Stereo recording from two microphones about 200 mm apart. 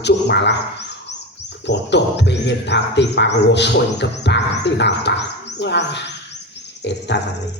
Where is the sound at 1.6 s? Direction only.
60° left (ahead or behind).